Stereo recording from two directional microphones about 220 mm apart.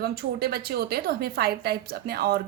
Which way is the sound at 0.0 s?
45° right (ahead or behind).